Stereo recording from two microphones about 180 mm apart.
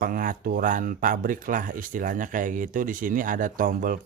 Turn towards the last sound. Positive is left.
turn(degrees=-50)  # may be behind; listen again after turning